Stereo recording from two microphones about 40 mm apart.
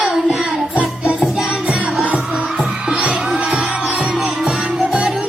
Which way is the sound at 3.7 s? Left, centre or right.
Right.